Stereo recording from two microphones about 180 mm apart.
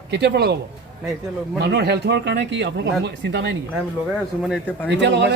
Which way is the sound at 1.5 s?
65° right (ahead or behind).